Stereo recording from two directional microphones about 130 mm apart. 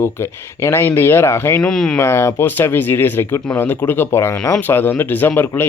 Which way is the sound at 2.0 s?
20° left (ahead or behind).